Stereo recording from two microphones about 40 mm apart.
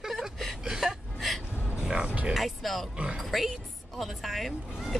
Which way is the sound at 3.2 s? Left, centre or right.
Centre.